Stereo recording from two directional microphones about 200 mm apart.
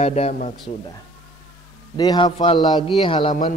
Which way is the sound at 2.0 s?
20° left (ahead or behind).